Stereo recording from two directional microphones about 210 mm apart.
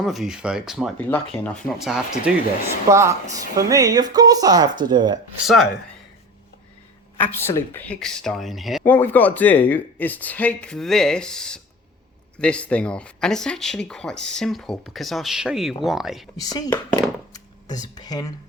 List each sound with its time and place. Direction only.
0.0 s speech: centre (ahead or behind)
0.9 s speech: 10° left (ahead or behind)
2.9 s speech: 15° right (ahead or behind)
5.5 s speech: centre (ahead or behind)
7.2 s speech: 10° left (ahead or behind)
16.4 s speech: 15° left (ahead or behind)